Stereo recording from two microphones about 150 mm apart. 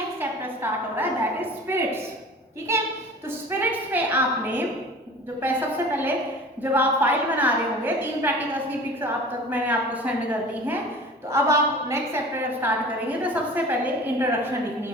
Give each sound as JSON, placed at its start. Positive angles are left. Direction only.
{"t": 0.2, "sound": "a sound", "side_deg": -15}
{"t": 3.2, "sound": "a woman's voice", "side_deg": -15}
{"t": 9.5, "sound": "a woman's voice", "side_deg": -10}